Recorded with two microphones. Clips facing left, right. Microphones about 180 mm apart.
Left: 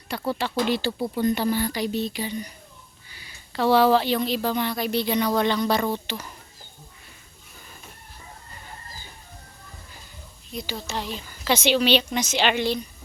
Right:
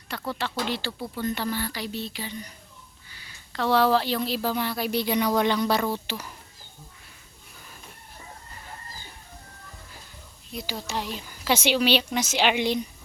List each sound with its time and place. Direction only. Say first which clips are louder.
0.1 s speech: left 4 dB; 10° left (ahead or behind); by 6.3 s 5° right (ahead or behind)
10.5 s speech: left 1 dB; 10° right (ahead or behind)